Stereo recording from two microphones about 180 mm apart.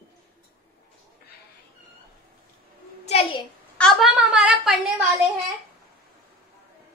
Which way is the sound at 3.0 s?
35° left (ahead or behind).